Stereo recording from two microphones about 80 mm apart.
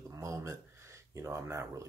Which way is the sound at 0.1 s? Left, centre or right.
Right.